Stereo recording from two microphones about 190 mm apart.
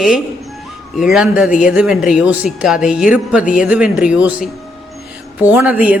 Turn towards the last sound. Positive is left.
turn(degrees=-5)  # may be behind; listen again after turning